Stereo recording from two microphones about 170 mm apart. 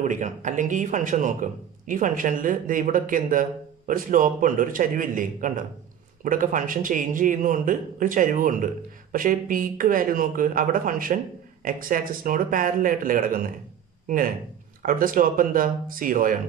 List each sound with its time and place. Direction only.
0.0 s speech: 45° right (ahead or behind)